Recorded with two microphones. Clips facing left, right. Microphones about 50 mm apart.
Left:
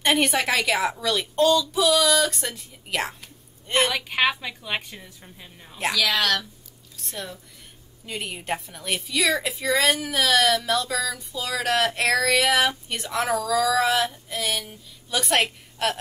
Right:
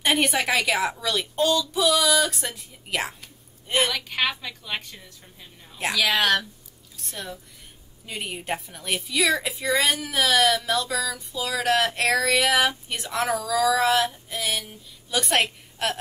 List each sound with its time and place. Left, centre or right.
0.0 s a woman's voice: centre
3.9 s a woman's voice: centre
5.8 s speech: centre
6.0 s speech: centre
7.0 s a woman's voice: centre